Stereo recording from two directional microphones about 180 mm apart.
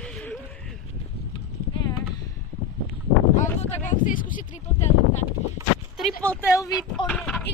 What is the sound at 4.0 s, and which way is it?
Speech, 50° left (ahead or behind).